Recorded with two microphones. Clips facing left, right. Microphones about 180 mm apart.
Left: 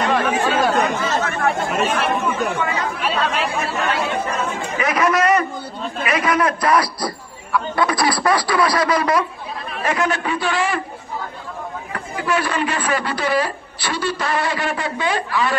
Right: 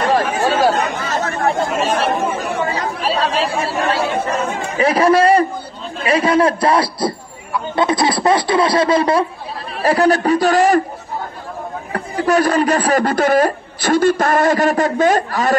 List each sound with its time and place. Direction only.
0.1 s chatter: 40° right (ahead or behind)
4.7 s a sound: 30° right (ahead or behind)
6.0 s a man's voice: 30° right (ahead or behind)
11.9 s a man's voice: 40° right (ahead or behind)